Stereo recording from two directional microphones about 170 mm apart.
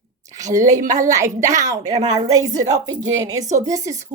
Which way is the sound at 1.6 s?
20° right (ahead or behind).